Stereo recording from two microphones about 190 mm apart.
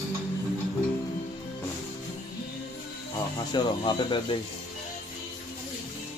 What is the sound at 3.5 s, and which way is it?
Speech, 25° left (ahead or behind).